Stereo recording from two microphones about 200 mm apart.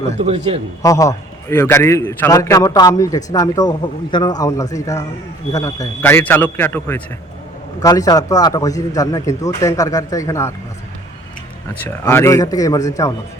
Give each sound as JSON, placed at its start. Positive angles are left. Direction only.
{"t": 0.2, "sound": "a man's voice", "side_deg": -30}
{"t": 0.8, "sound": "a man's voice", "side_deg": 15}
{"t": 11.8, "sound": "a man's voice", "side_deg": 10}